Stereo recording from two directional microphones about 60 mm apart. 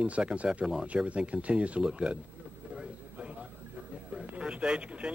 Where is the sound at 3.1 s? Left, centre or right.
Centre.